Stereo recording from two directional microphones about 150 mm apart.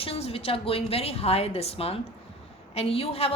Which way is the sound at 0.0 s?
40° left (ahead or behind).